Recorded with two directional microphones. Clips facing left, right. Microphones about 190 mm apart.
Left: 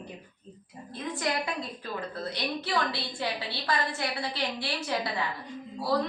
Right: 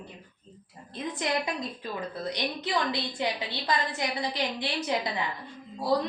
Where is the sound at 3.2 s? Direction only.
15° right (ahead or behind).